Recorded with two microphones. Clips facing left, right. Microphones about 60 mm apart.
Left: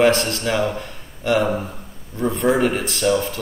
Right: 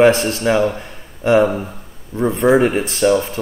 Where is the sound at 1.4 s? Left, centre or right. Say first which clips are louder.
Right 5 dB; centre.